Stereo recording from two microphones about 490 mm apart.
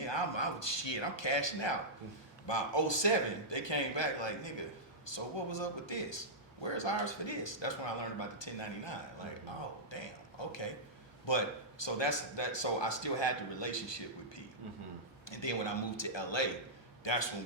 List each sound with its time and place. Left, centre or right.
0.0 s a man's voice: left